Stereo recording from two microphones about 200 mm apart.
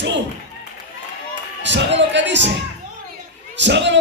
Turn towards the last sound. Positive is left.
turn(degrees=-60)  # may be behind; listen again after turning